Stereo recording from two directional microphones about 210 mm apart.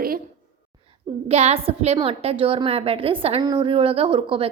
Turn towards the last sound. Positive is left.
turn(degrees=-25)  # may be behind; listen again after turning